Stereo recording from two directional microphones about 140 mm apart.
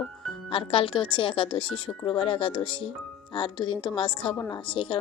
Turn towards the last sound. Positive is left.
turn(degrees=35)  # may be behind; listen again after turning